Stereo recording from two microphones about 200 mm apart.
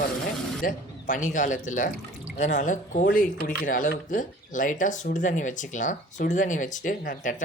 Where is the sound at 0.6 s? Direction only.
40° left (ahead or behind).